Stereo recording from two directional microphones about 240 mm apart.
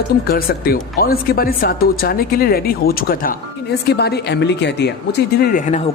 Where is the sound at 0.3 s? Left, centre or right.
Left.